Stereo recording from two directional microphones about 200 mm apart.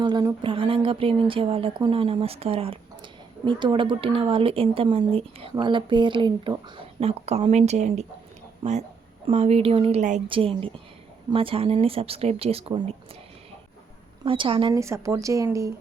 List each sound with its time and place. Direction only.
0.0 s speech: 20° right (ahead or behind)
9.2 s speech: 30° right (ahead or behind)
14.3 s speech: 25° right (ahead or behind)